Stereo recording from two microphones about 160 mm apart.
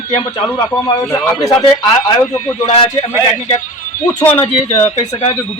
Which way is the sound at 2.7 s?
40° left (ahead or behind).